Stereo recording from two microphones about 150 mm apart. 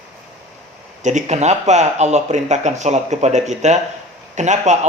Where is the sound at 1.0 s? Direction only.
50° right (ahead or behind).